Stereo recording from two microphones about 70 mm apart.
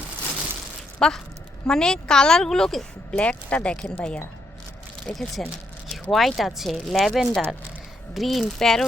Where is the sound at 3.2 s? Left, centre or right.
Centre.